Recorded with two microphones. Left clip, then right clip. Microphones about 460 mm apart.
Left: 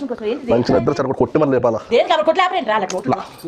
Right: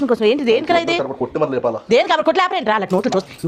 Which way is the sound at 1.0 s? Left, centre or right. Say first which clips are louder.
Left 3 dB; left.